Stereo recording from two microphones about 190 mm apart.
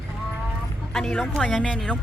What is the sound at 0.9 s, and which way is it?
Speech, 5° left (ahead or behind).